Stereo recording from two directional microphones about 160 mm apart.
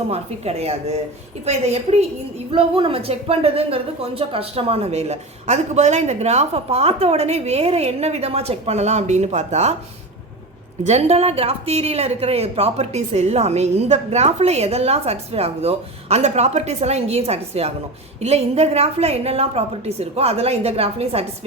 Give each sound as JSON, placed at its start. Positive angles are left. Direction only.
{"t": 0.1, "sound": "speech", "side_deg": -40}
{"t": 10.8, "sound": "speech", "side_deg": -40}